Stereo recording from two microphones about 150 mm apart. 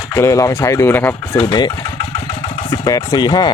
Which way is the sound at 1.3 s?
30° left (ahead or behind).